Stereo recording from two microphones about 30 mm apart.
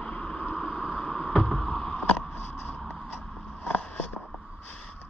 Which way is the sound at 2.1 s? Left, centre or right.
Left.